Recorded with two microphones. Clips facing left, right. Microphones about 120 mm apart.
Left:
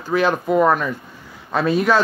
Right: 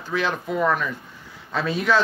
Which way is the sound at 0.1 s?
45° left (ahead or behind).